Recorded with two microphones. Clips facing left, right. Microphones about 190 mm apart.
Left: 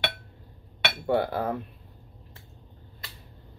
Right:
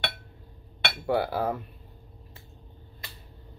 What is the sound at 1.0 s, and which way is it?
Cutlery, centre (ahead or behind).